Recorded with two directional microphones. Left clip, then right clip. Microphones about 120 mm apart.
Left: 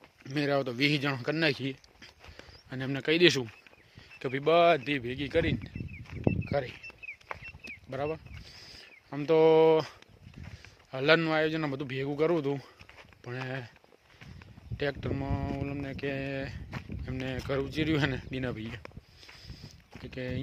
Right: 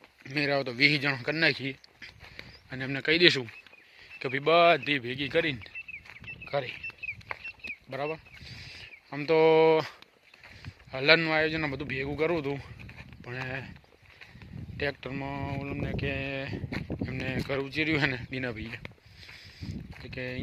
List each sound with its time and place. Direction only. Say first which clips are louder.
0.3 s speech: right 1 dB; 40° left (ahead or behind); by 5.7 s 15° left (ahead or behind)
6.5 s speech: right 5 dB; 40° left (ahead or behind)
7.6 s a sound: even; 35° left (ahead or behind); by 9.9 s 15° left (ahead or behind)
10.9 s speech: right 2 dB; 30° left (ahead or behind)
14.8 s speech: even; 45° left (ahead or behind); by 18.7 s 25° left (ahead or behind)
20.1 s speech: right 1 dB; 35° left (ahead or behind)